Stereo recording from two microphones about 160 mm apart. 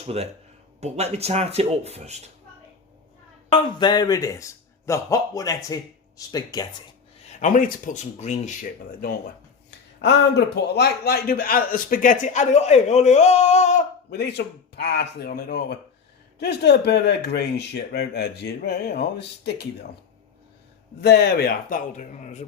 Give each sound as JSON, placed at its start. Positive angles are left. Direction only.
{"t": 0.0, "sound": "speech", "side_deg": -40}
{"t": 3.5, "sound": "speech", "side_deg": 25}
{"t": 7.3, "sound": "a man's voice", "side_deg": 55}
{"t": 9.6, "sound": "a man's voice", "side_deg": 90}
{"t": 14.1, "sound": "speech", "side_deg": 90}
{"t": 21.0, "sound": "speech", "side_deg": 90}